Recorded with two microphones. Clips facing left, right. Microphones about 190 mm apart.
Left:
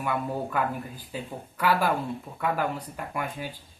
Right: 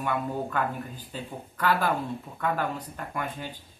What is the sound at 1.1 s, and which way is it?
Speech, 10° left (ahead or behind).